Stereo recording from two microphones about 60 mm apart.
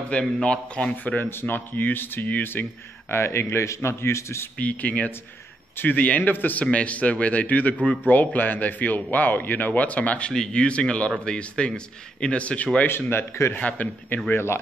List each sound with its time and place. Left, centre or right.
0.1 s a man's voice: centre
1.3 s speech: left
3.1 s a man's voice: left
4.6 s speech: left
6.6 s a man's voice: left
12.8 s speech: left
13.6 s speech: left
14.3 s a man's voice: left